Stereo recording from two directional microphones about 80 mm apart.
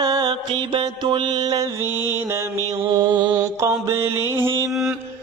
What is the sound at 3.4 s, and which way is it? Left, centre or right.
Mantra, right.